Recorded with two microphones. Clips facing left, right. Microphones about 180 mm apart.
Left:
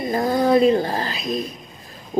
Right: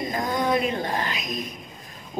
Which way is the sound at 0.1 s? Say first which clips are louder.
Left 8 dB; 35° left (ahead or behind).